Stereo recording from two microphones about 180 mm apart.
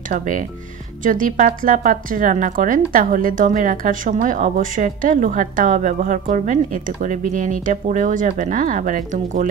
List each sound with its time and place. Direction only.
0.1 s a woman's voice: 45° right (ahead or behind)